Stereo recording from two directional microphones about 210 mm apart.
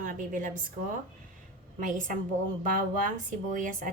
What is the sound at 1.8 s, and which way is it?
A woman's voice, 40° right (ahead or behind).